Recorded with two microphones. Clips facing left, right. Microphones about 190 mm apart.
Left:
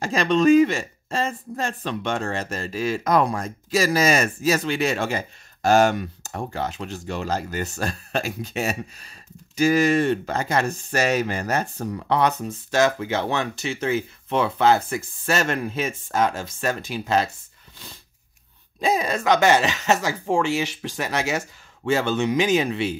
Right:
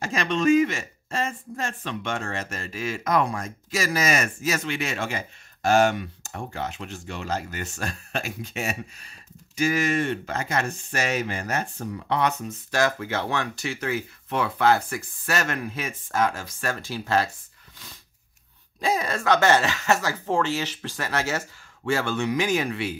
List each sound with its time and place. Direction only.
0.0 s speech: 35° left (ahead or behind)
18.8 s speech: 20° left (ahead or behind)